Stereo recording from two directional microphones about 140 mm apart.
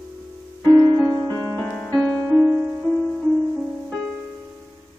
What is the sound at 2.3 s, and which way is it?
Music, 20° right (ahead or behind).